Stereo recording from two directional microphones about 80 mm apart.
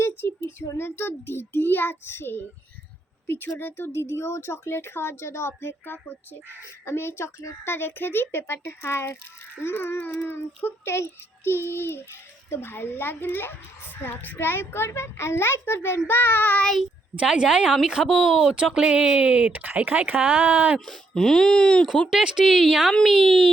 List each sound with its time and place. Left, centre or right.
0.8 s a woman's voice: left
17.2 s speech: centre
20.7 s speech: centre
22.1 s speech: centre